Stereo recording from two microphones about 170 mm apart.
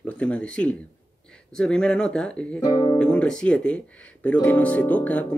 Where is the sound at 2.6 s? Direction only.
20° left (ahead or behind).